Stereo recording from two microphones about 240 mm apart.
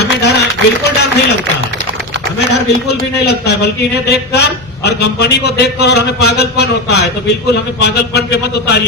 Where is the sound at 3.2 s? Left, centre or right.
Left.